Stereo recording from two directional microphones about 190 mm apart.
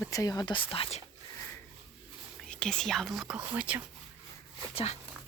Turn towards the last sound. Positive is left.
turn(degrees=30)  # may be behind; listen again after turning